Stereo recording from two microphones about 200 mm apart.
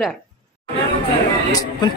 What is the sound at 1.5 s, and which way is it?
Speech, 20° left (ahead or behind).